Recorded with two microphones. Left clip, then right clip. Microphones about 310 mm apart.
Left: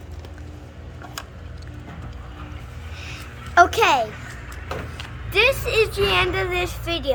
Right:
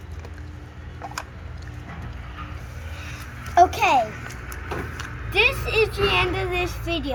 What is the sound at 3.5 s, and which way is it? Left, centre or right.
Speech, centre.